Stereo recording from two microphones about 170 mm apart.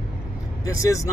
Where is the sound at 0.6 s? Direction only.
20° left (ahead or behind).